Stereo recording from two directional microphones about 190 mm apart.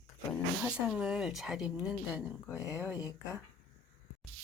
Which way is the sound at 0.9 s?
5° right (ahead or behind).